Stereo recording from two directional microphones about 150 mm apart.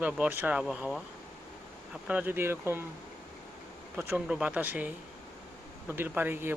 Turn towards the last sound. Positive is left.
turn(degrees=-15)  # may be behind; listen again after turning